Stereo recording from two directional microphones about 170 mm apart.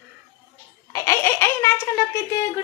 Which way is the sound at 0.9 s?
15° left (ahead or behind).